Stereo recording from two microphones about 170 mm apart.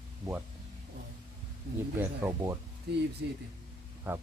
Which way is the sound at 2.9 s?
75° right (ahead or behind).